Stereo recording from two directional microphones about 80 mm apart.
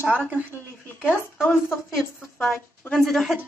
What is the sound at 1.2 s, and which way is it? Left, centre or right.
A woman's voice, left.